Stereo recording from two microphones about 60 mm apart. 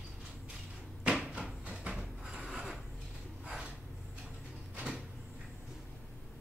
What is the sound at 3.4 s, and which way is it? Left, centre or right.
Snort, centre.